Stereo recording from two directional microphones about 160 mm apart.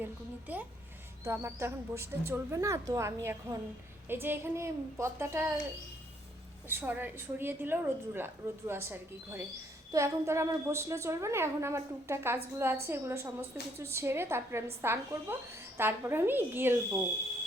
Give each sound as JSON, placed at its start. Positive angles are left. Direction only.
{"t": 0.0, "sound": "a woman's voice", "side_deg": -10}
{"t": 6.7, "sound": "a woman's voice", "side_deg": -10}